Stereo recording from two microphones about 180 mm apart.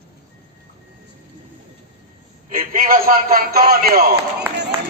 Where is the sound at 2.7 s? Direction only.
50° right (ahead or behind); by 4.7 s 70° right (ahead or behind).